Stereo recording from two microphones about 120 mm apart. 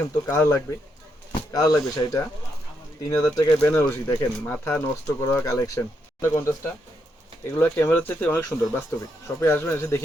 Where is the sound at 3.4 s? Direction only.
15° left (ahead or behind).